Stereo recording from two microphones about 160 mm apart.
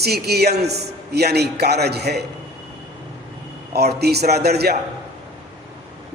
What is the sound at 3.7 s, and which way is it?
A man's voice, 90° right.